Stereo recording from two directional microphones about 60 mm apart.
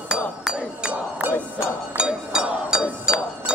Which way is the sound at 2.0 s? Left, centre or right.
Centre.